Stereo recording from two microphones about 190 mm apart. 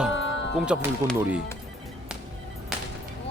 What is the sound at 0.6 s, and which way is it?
Speech, 5° right (ahead or behind).